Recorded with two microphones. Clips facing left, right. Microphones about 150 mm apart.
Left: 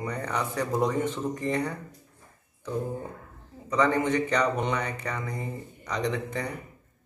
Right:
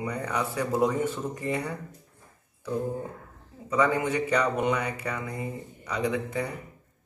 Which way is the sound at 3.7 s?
10° right (ahead or behind).